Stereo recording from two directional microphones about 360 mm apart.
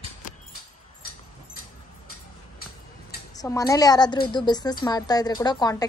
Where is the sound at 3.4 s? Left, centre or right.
Centre.